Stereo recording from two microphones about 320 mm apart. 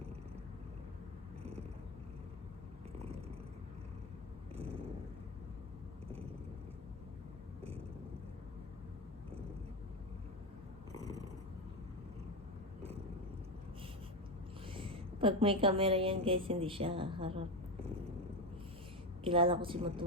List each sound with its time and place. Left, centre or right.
4.5 s a sound: centre
10.9 s purr: centre
14.7 s a woman's voice: centre
19.2 s a woman's voice: centre